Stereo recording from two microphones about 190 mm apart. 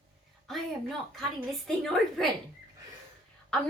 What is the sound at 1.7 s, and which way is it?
Speech, centre (ahead or behind).